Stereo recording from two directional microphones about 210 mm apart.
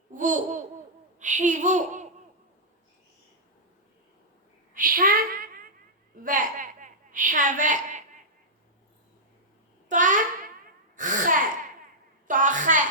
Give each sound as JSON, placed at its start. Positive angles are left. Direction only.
{"t": 0.1, "sound": "babbling", "side_deg": -35}
{"t": 1.2, "sound": "laughter", "side_deg": -35}
{"t": 4.7, "sound": "a sound", "side_deg": -40}
{"t": 9.9, "sound": "babbling", "side_deg": -35}
{"t": 10.9, "sound": "a sound", "side_deg": -40}
{"t": 12.3, "sound": "laughter", "side_deg": -40}